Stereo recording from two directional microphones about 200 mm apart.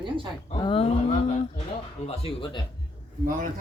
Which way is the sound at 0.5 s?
25° left (ahead or behind).